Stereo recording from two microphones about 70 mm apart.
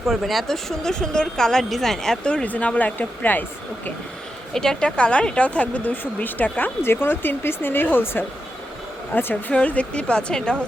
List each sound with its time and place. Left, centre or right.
0.1 s speech: centre; by 3.4 s left
4.5 s speech: centre